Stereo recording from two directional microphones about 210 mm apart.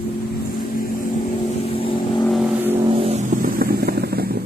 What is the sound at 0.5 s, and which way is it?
Vehicle, 45° left (ahead or behind).